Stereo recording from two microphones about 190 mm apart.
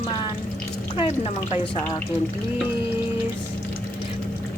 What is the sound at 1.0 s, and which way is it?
Speech, 35° left (ahead or behind).